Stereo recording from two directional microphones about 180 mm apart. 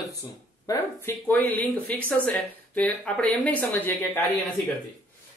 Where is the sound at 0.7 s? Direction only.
10° left (ahead or behind).